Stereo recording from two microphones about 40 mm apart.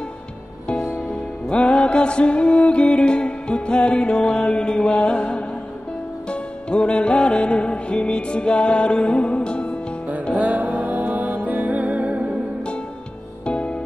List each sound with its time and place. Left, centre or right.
1.5 s music: left
6.7 s music: left
10.3 s music: right
13.5 s music: left